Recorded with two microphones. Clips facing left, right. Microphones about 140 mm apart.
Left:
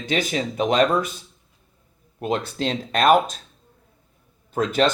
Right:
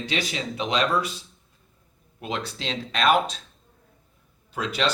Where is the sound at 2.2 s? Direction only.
45° left (ahead or behind).